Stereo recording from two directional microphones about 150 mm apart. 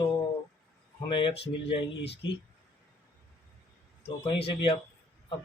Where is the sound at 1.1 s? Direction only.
35° left (ahead or behind).